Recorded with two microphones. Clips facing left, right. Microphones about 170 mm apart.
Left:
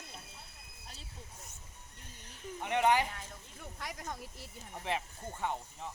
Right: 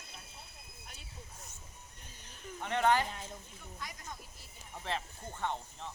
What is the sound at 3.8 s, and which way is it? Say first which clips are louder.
Speech: left 5 dB; 70° left (ahead or behind).